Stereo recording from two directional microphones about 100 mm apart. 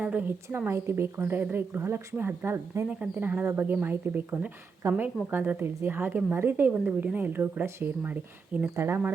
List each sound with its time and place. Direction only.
0.0 s a woman's voice: 15° right (ahead or behind)